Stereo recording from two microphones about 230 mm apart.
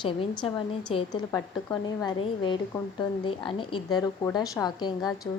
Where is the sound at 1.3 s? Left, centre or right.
Centre.